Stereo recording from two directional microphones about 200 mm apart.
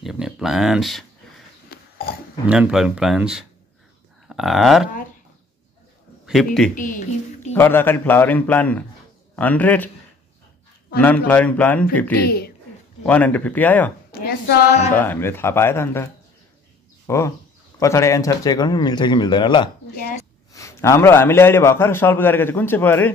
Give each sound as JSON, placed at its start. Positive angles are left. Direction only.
{"t": 0.0, "sound": "speech", "side_deg": 0}
{"t": 1.7, "sound": "burping", "side_deg": 50}
{"t": 2.4, "sound": "speech", "side_deg": -5}
{"t": 4.3, "sound": "a sound", "side_deg": 0}
{"t": 6.2, "sound": "speech", "side_deg": 0}
{"t": 6.7, "sound": "speech", "side_deg": 40}
{"t": 7.5, "sound": "a man's voice", "side_deg": 10}
{"t": 11.0, "sound": "a man's voice", "side_deg": 10}
{"t": 12.3, "sound": "speech", "side_deg": 50}
{"t": 13.0, "sound": "a man's voice", "side_deg": 5}
{"t": 14.2, "sound": "speech", "side_deg": 55}
{"t": 15.0, "sound": "a man's voice", "side_deg": 10}
{"t": 20.0, "sound": "speech", "side_deg": 45}
{"t": 20.5, "sound": "a man's voice", "side_deg": 15}